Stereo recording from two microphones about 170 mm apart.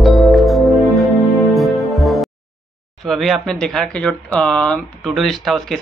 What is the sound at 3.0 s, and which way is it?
Speech, centre (ahead or behind).